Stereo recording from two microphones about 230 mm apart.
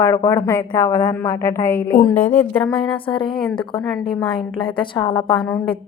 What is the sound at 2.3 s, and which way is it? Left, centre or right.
Speech, centre.